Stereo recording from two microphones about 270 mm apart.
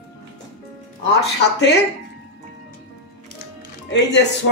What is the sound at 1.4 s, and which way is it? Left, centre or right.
Speech, left.